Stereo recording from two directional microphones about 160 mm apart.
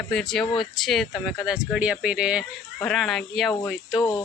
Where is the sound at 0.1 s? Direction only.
Centre (ahead or behind).